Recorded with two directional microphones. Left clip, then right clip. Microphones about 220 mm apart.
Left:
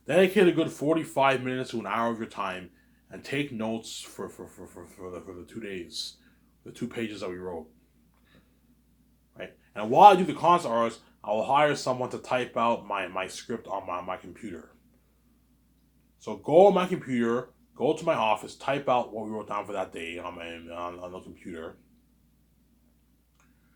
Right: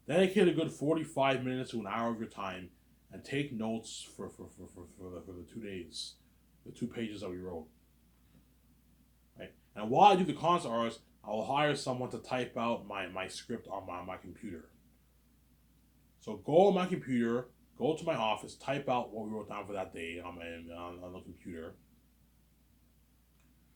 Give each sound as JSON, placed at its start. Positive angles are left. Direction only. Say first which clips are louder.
{"t": 0.0, "sound": "speech", "louder": "left 7 dB", "side_deg": 20}
{"t": 9.4, "sound": "speech", "louder": "left 8 dB", "side_deg": 20}
{"t": 16.2, "sound": "speech", "louder": "left 7 dB", "side_deg": 20}